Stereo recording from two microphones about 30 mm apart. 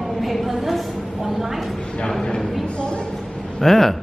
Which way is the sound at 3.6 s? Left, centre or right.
Centre.